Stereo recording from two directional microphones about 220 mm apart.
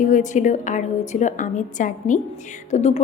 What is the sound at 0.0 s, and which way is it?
A woman's voice, 35° left (ahead or behind).